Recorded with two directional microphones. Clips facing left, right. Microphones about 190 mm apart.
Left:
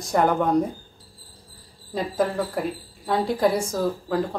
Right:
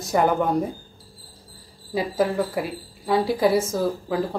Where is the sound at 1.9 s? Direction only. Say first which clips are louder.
Right 2 dB; 5° right (ahead or behind).